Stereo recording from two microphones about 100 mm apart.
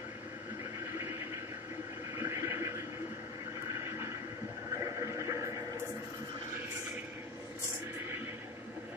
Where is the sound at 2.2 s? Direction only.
25° right (ahead or behind).